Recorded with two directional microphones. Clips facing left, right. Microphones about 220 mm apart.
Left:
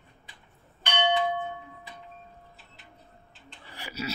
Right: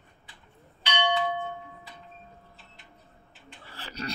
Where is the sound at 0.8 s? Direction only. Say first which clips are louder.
Left 1 dB; 50° left (ahead or behind).